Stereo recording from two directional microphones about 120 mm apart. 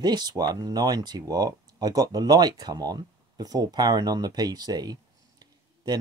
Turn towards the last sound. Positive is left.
turn(degrees=-35)  # may be behind; listen again after turning